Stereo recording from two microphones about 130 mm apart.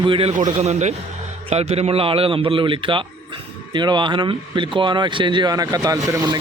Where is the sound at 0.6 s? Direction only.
60° right (ahead or behind).